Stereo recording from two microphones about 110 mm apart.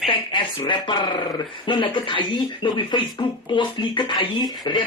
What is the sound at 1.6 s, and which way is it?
Speech, 45° left (ahead or behind).